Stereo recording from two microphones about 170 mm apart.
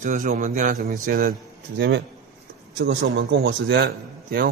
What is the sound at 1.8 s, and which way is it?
A man's voice, 90° right.